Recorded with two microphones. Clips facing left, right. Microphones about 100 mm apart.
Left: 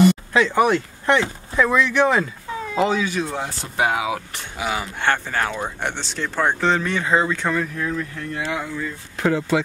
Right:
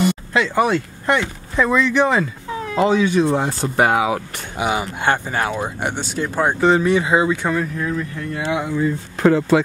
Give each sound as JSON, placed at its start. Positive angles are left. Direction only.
{"t": 0.7, "sound": "speech", "side_deg": -10}
{"t": 2.9, "sound": "speech", "side_deg": -25}
{"t": 4.6, "sound": "speech", "side_deg": -20}
{"t": 8.4, "sound": "speech", "side_deg": -15}
{"t": 9.2, "sound": "speech", "side_deg": -50}